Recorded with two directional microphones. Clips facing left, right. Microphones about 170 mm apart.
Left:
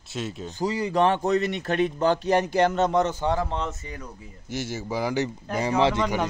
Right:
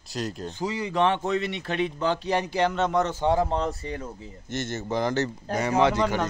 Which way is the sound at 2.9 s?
25° left (ahead or behind).